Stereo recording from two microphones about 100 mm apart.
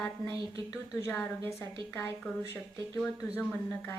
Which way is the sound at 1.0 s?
25° left (ahead or behind).